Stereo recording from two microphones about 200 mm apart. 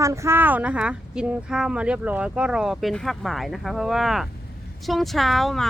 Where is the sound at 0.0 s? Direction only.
15° right (ahead or behind).